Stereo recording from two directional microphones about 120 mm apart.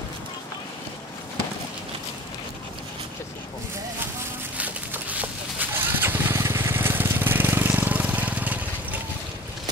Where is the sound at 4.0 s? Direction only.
20° right (ahead or behind).